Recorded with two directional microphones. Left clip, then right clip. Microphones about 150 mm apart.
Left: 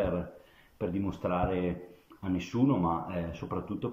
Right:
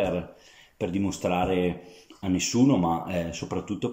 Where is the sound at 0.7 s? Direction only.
15° right (ahead or behind).